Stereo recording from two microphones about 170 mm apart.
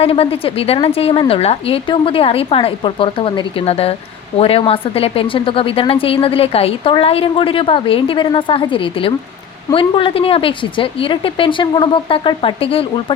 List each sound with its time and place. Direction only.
0.0 s a woman's voice: 35° left (ahead or behind)